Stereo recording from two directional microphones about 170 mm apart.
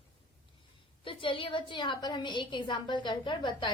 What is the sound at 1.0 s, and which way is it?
A woman's voice, 30° left (ahead or behind).